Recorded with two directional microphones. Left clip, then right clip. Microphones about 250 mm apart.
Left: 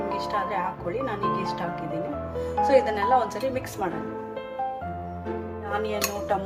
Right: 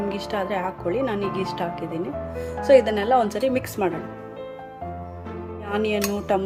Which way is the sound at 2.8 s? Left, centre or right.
Right.